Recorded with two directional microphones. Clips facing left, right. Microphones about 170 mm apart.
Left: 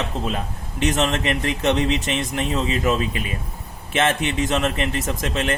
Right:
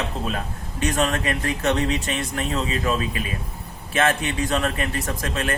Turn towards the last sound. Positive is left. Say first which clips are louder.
# left 3 dB
turn(degrees=20)  # may be behind; listen again after turning